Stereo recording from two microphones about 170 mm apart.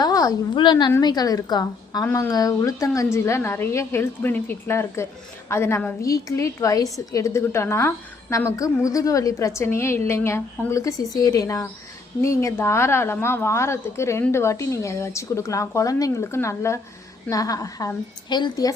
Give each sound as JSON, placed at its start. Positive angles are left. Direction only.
{"t": 0.0, "sound": "a woman's voice", "side_deg": 20}